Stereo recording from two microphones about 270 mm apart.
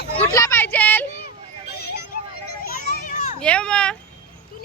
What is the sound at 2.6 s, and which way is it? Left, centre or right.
Children playing, left.